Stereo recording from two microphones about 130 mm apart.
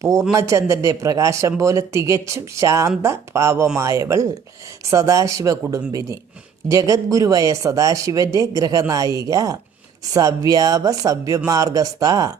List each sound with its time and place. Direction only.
0.0 s speech: 25° right (ahead or behind)